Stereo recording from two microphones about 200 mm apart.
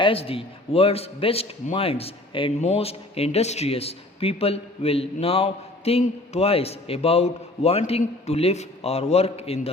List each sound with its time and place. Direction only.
0.0 s a man's voice: 30° left (ahead or behind)